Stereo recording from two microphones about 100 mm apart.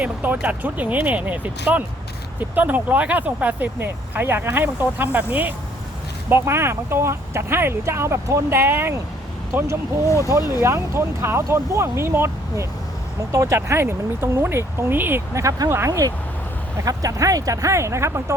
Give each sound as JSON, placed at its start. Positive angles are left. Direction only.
{"t": 0.0, "sound": "speech", "side_deg": -15}
{"t": 10.2, "sound": "speech", "side_deg": -30}